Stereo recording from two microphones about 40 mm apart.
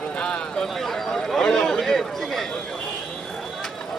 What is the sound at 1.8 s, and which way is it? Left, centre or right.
Chatter, centre.